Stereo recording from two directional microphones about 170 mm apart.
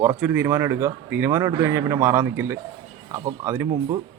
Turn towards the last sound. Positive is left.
turn(degrees=-15)  # may be behind; listen again after turning